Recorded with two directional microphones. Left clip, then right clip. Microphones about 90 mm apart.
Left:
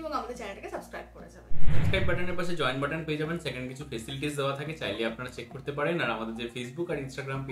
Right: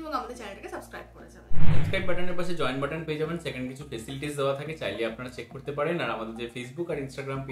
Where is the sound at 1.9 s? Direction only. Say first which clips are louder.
Left 1 dB; 20° left (ahead or behind).